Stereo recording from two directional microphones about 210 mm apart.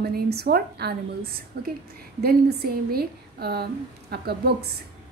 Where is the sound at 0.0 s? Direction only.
50° right (ahead or behind).